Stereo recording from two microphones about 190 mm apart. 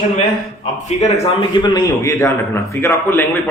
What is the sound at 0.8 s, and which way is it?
Speech, 35° left (ahead or behind).